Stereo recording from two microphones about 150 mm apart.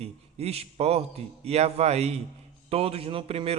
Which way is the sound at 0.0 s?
45° right (ahead or behind).